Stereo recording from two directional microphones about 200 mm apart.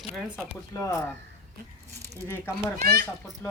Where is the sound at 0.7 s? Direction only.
15° left (ahead or behind).